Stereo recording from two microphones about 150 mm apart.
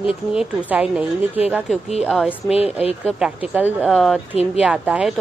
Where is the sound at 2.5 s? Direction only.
40° left (ahead or behind).